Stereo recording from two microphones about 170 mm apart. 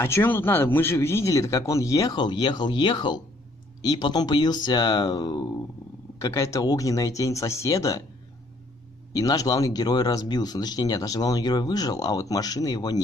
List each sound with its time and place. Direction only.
0.0 s speech: 15° left (ahead or behind)
9.1 s speech: 20° left (ahead or behind)